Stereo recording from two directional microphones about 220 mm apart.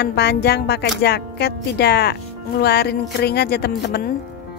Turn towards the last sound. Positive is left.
turn(degrees=45)  # may be behind; listen again after turning